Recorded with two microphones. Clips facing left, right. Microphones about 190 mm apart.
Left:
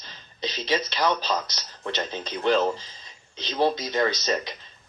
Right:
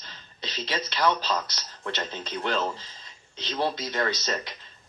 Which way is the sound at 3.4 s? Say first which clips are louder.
Left 5 dB; 15° left (ahead or behind).